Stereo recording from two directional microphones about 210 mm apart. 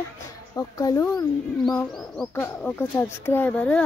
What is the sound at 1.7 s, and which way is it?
Speech, centre (ahead or behind).